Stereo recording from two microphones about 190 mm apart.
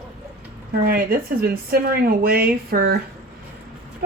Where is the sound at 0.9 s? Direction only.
50° right (ahead or behind).